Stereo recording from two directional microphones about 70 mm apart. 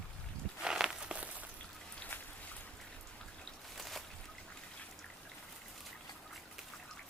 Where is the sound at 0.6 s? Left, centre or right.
Centre.